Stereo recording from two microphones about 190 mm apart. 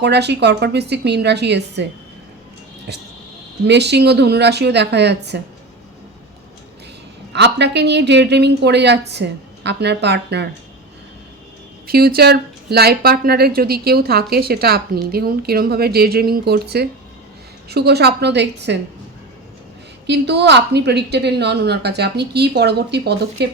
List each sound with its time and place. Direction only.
0.0 s a woman's voice: 60° right (ahead or behind)
3.7 s a woman's voice: 60° right (ahead or behind)
7.3 s a woman's voice: 65° right (ahead or behind)
11.9 s a woman's voice: 55° right (ahead or behind)
20.1 s a woman's voice: 65° right (ahead or behind)